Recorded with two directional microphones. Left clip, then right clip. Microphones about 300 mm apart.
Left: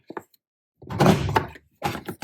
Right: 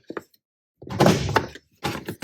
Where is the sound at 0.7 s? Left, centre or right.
Centre.